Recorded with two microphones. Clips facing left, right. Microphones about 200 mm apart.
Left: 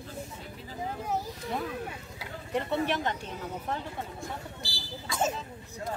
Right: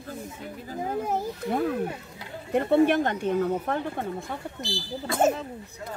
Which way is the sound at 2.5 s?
50° right (ahead or behind).